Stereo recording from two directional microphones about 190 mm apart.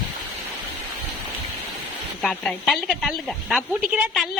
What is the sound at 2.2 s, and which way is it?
A woman's voice, 5° left (ahead or behind).